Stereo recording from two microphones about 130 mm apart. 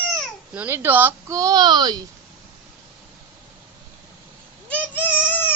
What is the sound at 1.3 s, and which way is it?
Speech, 25° right (ahead or behind).